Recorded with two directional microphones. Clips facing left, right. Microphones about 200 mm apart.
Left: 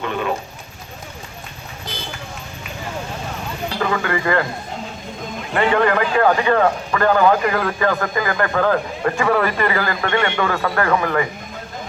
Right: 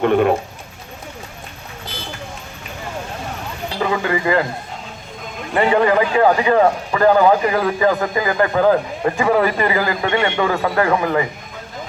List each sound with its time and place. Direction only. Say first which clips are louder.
0.0 s speech: right 8 dB; 55° right (ahead or behind)
3.8 s a man's voice: right 2 dB; 15° right (ahead or behind)
5.8 s a man's voice: right 2 dB; 15° right (ahead or behind)